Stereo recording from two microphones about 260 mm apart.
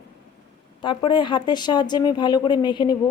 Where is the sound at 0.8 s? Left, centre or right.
Centre.